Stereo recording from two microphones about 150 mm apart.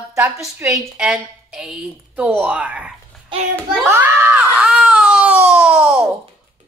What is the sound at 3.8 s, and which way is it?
Screaming, 15° right (ahead or behind).